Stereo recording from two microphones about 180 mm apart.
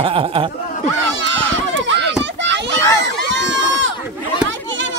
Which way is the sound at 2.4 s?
80° right.